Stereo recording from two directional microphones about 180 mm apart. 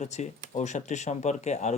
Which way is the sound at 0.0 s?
40° left (ahead or behind).